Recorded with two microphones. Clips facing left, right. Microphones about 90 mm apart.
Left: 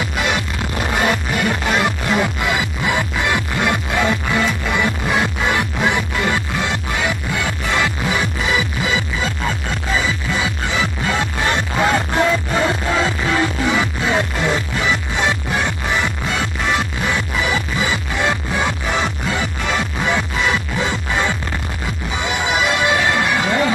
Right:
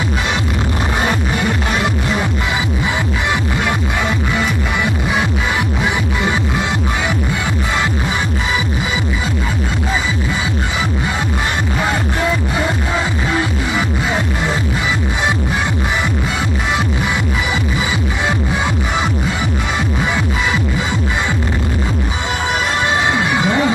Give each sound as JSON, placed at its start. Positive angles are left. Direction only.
{"t": 22.9, "sound": "music", "side_deg": -20}